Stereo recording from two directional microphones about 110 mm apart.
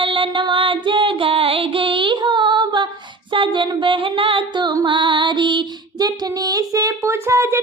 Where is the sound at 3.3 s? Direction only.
50° right (ahead or behind).